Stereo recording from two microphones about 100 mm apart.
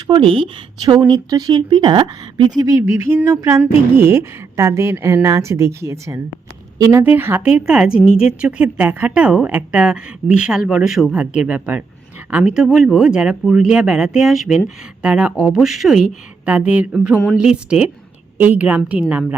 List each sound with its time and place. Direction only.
0.1 s speech: 55° right (ahead or behind)
1.0 s speech: 40° right (ahead or behind)
2.6 s a sound: 40° right (ahead or behind)
2.8 s a woman's voice: 25° right (ahead or behind)
7.0 s a woman's voice: 20° right (ahead or behind)
7.5 s a woman's voice: 10° right (ahead or behind)
16.5 s a woman's voice: 15° right (ahead or behind)